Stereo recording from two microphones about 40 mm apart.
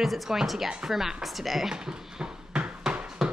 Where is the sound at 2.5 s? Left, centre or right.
Right.